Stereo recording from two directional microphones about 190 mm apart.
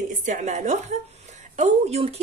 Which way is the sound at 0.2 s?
40° right (ahead or behind).